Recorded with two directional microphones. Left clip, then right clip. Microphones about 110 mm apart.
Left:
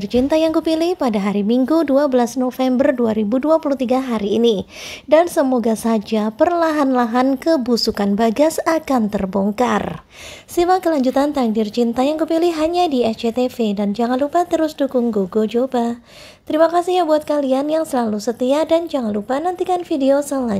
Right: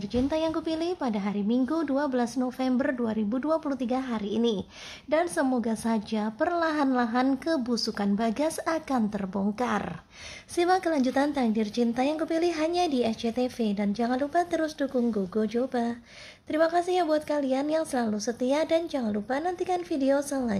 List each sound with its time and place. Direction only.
0.1 s a woman's voice: 50° left (ahead or behind)
10.5 s speech: 30° left (ahead or behind)